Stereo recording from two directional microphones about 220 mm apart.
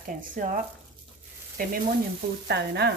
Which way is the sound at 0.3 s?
40° right (ahead or behind).